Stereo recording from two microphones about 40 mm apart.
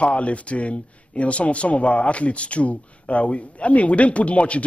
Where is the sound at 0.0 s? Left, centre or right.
Left.